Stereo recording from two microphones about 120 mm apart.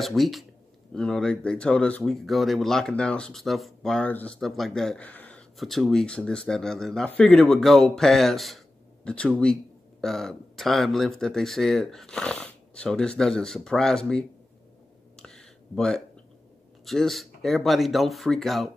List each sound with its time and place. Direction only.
0.0 s a man's voice: centre (ahead or behind)
4.4 s a man's voice: centre (ahead or behind)
5.6 s a man's voice: centre (ahead or behind)
15.1 s a sound: 5° left (ahead or behind)
16.8 s a man's voice: centre (ahead or behind)